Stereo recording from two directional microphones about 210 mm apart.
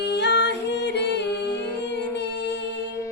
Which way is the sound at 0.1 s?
55° left (ahead or behind).